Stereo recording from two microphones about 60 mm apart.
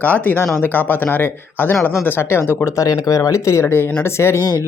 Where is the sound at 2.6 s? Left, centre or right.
Left.